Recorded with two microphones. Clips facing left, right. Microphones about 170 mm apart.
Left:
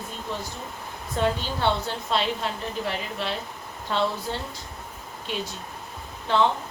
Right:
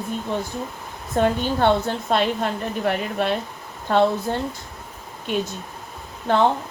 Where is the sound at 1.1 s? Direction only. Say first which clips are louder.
Right 6 dB; 50° right (ahead or behind).